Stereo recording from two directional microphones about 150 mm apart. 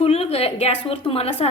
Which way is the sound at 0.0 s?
40° left (ahead or behind).